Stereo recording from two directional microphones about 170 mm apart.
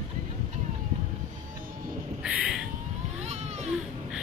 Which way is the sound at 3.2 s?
40° right (ahead or behind).